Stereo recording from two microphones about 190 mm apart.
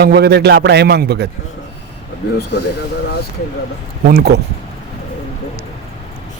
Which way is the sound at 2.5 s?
65° left (ahead or behind).